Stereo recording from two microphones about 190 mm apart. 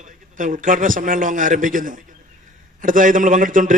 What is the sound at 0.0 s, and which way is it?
A man's voice, 45° right (ahead or behind).